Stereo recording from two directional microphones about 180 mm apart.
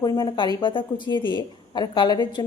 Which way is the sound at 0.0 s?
20° left (ahead or behind).